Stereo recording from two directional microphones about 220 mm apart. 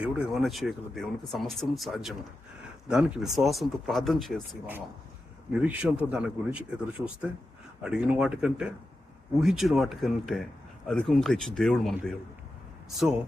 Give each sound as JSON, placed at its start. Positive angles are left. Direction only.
{"t": 0.0, "sound": "speech", "side_deg": -5}